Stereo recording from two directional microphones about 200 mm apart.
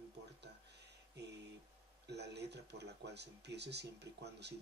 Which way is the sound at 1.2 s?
55° right (ahead or behind).